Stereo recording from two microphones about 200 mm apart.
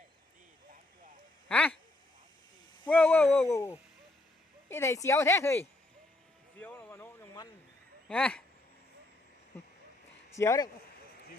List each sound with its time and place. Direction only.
1.5 s speech: 5° left (ahead or behind)
2.8 s speech: 5° left (ahead or behind)
6.6 s a sound: 10° left (ahead or behind)
8.0 s speech: 5° left (ahead or behind)
10.3 s speech: 15° left (ahead or behind)